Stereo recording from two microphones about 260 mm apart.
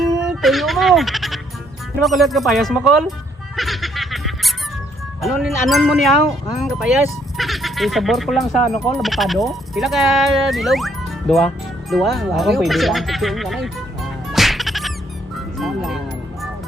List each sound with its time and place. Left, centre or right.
0.0 s speech: centre
3.5 s a sound: centre
5.2 s speech: centre
15.5 s music: centre